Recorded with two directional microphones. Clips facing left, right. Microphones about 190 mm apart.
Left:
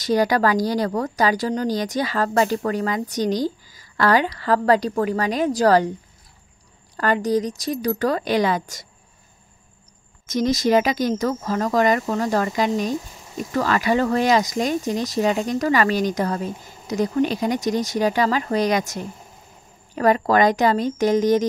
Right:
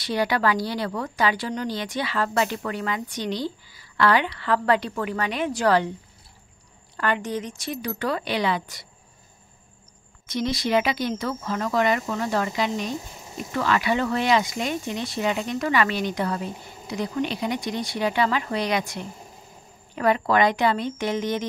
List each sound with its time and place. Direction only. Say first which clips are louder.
0.0 s speech: left 5 dB; 40° left (ahead or behind)
7.0 s speech: left 6 dB; 40° left (ahead or behind)
10.2 s speech: left 6 dB; 45° left (ahead or behind)